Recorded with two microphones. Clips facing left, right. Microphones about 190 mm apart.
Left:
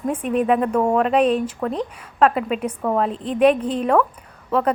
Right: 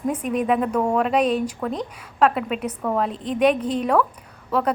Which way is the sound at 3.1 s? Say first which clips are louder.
Left 3 dB; 35° left (ahead or behind).